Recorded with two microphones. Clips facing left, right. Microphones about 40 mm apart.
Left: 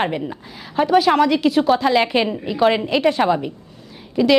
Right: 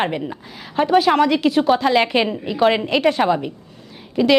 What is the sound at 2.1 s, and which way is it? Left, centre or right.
Speech, centre.